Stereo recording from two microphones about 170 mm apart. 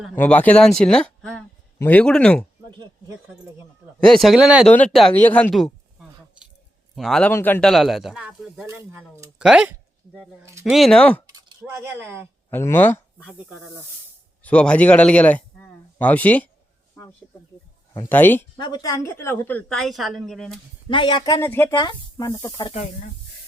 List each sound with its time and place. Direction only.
0.2 s speech: 10° left (ahead or behind)
2.6 s a sound: 25° right (ahead or behind)
4.1 s speech: centre (ahead or behind)
5.1 s a sound: 10° left (ahead or behind)
6.9 s a woman's voice: centre (ahead or behind)
7.7 s speech: centre (ahead or behind)
8.6 s speech: 15° right (ahead or behind); by 11.2 s 5° left (ahead or behind)
11.6 s speech: 15° right (ahead or behind)
12.5 s a woman's voice: 15° left (ahead or behind)
14.4 s a woman's voice: 5° left (ahead or behind)
18.0 s a woman's voice: 10° left (ahead or behind)
18.6 s a woman's voice: 25° left (ahead or behind); by 20.6 s centre (ahead or behind)
20.9 s speech: 30° left (ahead or behind)
22.7 s speech: 45° left (ahead or behind)